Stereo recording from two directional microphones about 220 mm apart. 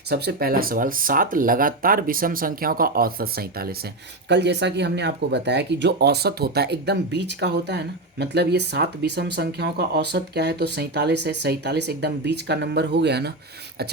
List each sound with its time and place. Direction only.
0.1 s speech: 45° right (ahead or behind)